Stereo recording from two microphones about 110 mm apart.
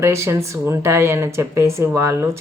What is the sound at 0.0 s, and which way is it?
Speech, 25° right (ahead or behind).